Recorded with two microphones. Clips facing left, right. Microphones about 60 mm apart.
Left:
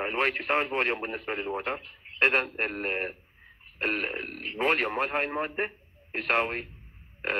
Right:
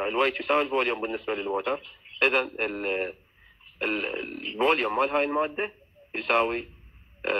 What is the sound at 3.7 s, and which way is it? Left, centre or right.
Burping, left.